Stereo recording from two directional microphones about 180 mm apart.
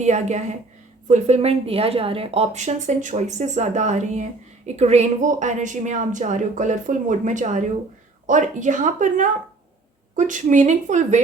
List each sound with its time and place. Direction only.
0.0 s a woman's voice: 40° right (ahead or behind)